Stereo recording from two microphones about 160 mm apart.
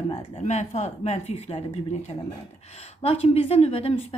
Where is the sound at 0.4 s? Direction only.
45° left (ahead or behind).